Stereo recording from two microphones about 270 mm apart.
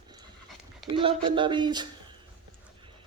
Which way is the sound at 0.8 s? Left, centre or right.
Centre.